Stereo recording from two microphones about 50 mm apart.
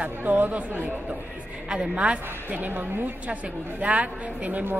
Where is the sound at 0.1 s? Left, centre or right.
Right.